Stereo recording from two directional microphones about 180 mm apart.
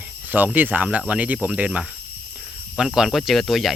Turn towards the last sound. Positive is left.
turn(degrees=0)  # may be behind; listen again after turning